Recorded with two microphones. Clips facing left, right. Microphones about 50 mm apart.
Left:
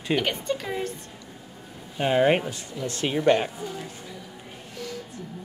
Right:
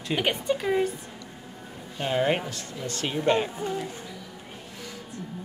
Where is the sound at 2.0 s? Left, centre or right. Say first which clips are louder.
Left 4 dB; centre.